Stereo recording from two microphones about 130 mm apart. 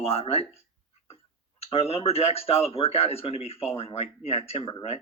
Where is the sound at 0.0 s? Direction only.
50° left (ahead or behind).